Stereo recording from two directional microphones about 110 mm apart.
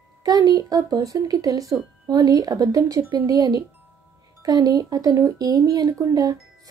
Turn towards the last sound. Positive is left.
turn(degrees=-35)  # may be behind; listen again after turning